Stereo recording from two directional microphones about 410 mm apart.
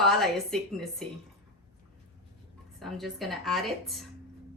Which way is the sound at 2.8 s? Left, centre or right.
Centre.